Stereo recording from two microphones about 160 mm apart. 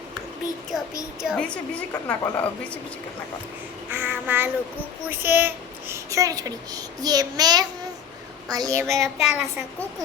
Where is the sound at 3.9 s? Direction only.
15° right (ahead or behind).